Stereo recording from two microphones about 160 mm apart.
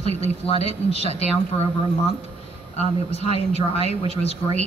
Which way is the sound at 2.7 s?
40° left (ahead or behind).